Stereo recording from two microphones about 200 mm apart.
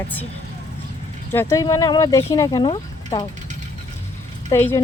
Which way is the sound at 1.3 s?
15° left (ahead or behind).